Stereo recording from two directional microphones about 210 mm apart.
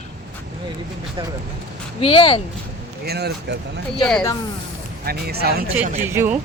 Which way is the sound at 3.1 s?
50° right (ahead or behind).